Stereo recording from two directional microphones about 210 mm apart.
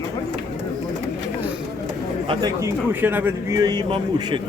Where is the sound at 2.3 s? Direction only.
20° right (ahead or behind).